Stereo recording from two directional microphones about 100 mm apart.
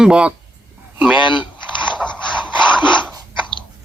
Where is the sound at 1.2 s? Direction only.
55° left (ahead or behind).